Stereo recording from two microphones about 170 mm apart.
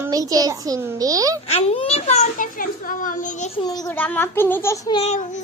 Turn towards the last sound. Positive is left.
turn(degrees=45)  # may be behind; listen again after turning